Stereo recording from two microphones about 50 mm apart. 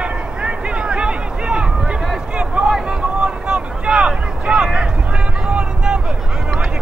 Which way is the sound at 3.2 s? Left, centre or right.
Right.